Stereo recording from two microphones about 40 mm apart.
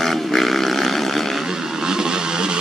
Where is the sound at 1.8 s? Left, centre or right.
Centre.